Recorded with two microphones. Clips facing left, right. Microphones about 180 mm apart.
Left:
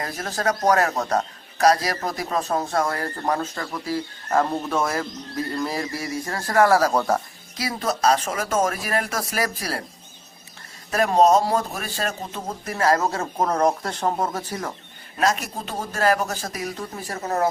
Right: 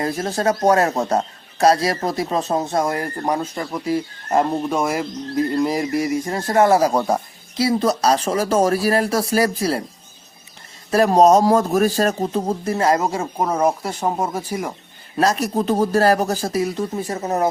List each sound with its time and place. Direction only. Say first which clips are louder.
0.0 s speech: right 5 dB; 25° right (ahead or behind)
7.5 s speech: right 8 dB; 30° right (ahead or behind)
10.9 s speech: right 4 dB; 40° right (ahead or behind); by 14.7 s 10° right (ahead or behind)
15.2 s speech: right 5 dB; 35° right (ahead or behind); by 17.5 s 20° right (ahead or behind)